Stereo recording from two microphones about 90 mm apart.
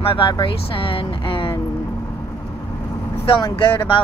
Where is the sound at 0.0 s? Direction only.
65° left (ahead or behind).